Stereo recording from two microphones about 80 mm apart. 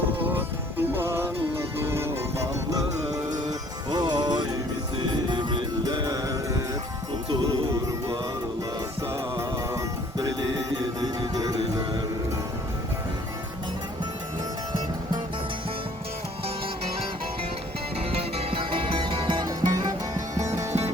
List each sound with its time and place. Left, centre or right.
0.2 s music: right
3.8 s music: right
7.4 s music: right
18.6 s music: right
19.5 s music: right